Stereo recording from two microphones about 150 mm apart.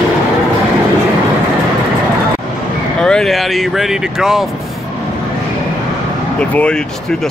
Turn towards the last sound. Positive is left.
turn(degrees=10)  # may be behind; listen again after turning